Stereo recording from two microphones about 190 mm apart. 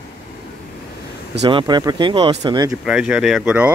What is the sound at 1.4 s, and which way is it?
Speech, 25° right (ahead or behind).